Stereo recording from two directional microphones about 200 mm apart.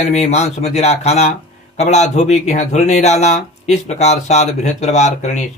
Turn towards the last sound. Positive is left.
turn(degrees=35)  # may be behind; listen again after turning